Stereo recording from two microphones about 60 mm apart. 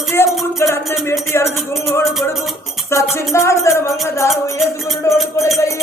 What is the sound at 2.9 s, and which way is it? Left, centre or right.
Speech, left.